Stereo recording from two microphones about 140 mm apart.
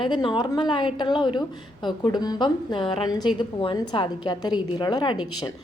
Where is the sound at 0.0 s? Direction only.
35° left (ahead or behind).